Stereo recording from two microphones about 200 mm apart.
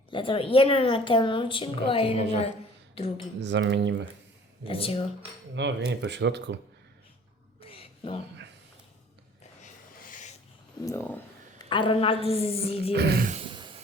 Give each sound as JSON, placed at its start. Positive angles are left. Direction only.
{"t": 0.1, "sound": "a woman's voice", "side_deg": 25}
{"t": 3.4, "sound": "speech", "side_deg": -65}
{"t": 4.6, "sound": "a woman's voice", "side_deg": 30}
{"t": 5.5, "sound": "speech", "side_deg": -60}
{"t": 7.6, "sound": "a sound", "side_deg": 30}
{"t": 10.1, "sound": "a sound", "side_deg": 40}
{"t": 11.7, "sound": "a woman's voice", "side_deg": 25}
{"t": 12.9, "sound": "speech", "side_deg": -50}
{"t": 13.3, "sound": "a sound", "side_deg": -25}